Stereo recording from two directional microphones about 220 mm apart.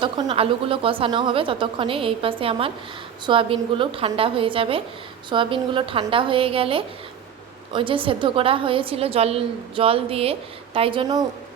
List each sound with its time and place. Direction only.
0.0 s a woman's voice: 20° right (ahead or behind)